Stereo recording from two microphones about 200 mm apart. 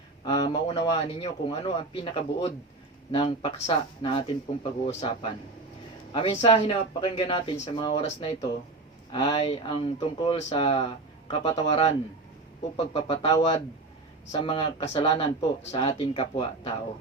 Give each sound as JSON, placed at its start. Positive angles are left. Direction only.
{"t": 0.3, "sound": "a man's voice", "side_deg": 25}